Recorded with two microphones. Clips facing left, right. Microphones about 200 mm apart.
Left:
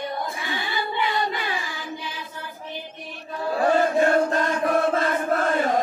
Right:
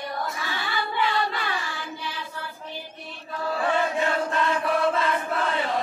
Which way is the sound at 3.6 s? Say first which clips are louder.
Left 6 dB; 40° left (ahead or behind).